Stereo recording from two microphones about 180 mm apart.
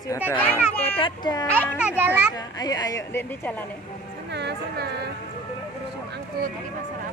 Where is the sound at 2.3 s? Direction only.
20° left (ahead or behind).